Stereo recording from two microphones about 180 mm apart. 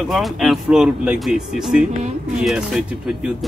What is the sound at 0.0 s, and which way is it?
Speech, centre (ahead or behind).